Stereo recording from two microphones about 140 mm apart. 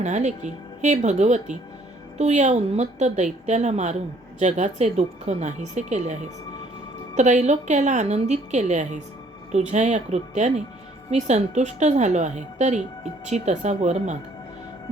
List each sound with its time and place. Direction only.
0.0 s a woman's voice: 55° right (ahead or behind)
7.2 s a woman's voice: 55° right (ahead or behind)